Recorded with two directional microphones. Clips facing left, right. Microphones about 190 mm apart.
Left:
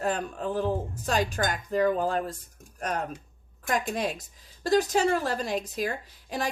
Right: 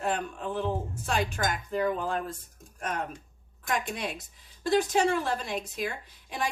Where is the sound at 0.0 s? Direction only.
40° left (ahead or behind).